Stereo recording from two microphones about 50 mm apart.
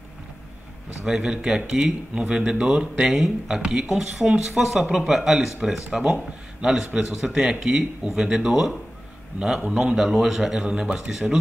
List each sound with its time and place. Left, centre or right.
1.0 s speech: centre
9.6 s speech: right
9.9 s speech: centre